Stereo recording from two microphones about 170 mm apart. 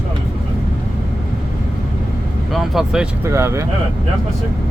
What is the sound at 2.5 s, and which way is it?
Speech, centre (ahead or behind).